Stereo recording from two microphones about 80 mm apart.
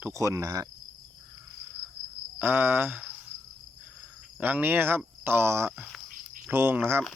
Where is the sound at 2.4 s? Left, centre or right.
Right.